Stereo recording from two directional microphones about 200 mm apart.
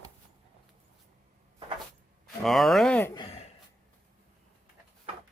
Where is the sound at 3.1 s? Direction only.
20° left (ahead or behind).